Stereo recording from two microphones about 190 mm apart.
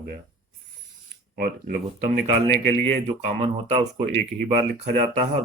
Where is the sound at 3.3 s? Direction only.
35° right (ahead or behind).